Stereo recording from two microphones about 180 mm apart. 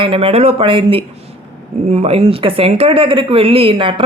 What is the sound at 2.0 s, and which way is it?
Speech, 30° right (ahead or behind).